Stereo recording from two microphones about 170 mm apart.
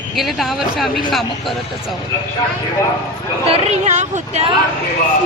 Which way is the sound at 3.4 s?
40° right (ahead or behind).